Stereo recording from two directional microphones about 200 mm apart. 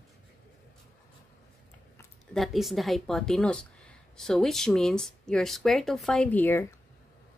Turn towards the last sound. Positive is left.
turn(degrees=10)  # may be behind; listen again after turning